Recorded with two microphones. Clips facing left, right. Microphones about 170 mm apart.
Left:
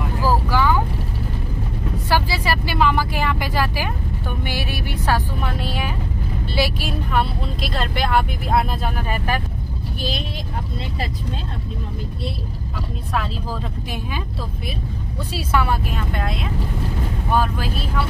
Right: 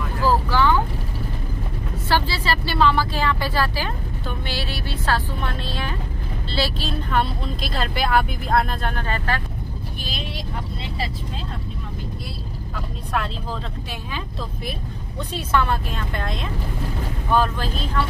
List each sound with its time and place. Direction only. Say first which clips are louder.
0.2 s vehicle: right 1 dB; 10° left (ahead or behind)
2.0 s vehicle: left 1 dB; 15° left (ahead or behind)
4.5 s a woman's voice: left 1 dB; 15° left (ahead or behind)
15.3 s a woman's voice: even; 10° left (ahead or behind)